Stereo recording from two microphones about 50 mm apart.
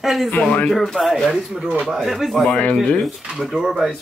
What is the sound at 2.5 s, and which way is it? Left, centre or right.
Speech, left.